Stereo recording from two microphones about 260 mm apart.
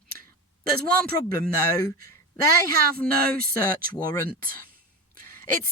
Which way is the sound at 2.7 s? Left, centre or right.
Right.